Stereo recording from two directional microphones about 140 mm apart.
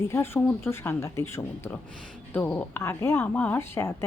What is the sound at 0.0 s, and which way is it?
A woman's voice, 20° left (ahead or behind).